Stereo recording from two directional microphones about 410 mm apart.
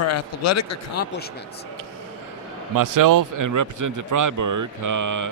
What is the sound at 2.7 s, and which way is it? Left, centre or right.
A man's voice, right.